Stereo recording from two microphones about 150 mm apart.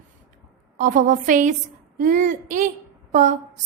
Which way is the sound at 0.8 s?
60° right (ahead or behind).